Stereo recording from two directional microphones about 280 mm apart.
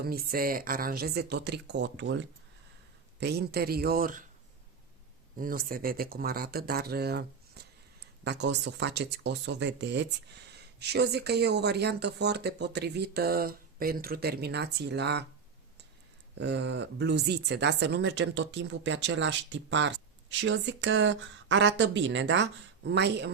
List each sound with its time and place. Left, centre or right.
0.0 s speech: right
5.4 s speech: right
16.4 s speech: right